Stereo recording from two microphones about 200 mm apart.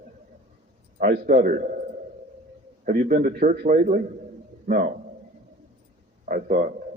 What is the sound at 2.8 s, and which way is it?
A man's voice, 40° right (ahead or behind).